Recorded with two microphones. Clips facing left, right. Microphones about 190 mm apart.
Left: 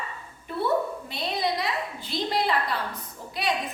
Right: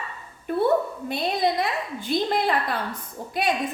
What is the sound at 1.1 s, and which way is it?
A woman's voice, 50° right (ahead or behind).